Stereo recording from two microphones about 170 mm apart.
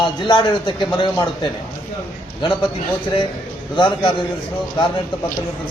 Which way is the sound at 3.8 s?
30° left (ahead or behind).